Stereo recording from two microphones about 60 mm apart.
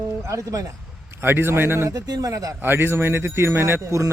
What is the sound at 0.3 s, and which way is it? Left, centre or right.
Speech, right.